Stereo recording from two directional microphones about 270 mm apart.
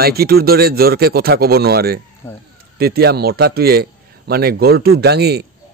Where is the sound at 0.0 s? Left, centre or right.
Right.